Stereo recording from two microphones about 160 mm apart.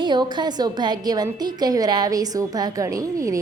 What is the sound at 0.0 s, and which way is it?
A woman's voice, 25° right (ahead or behind).